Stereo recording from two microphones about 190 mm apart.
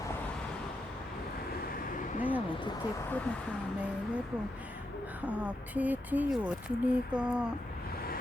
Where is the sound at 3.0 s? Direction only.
10° left (ahead or behind).